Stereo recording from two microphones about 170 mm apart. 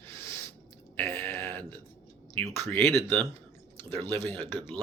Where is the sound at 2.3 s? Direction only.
15° left (ahead or behind).